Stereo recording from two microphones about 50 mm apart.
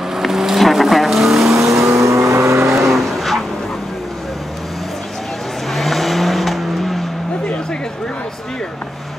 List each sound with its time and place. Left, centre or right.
0.1 s vehicle: centre
1.5 s vehicle: right
2.8 s vehicle: centre
5.7 s vehicle: centre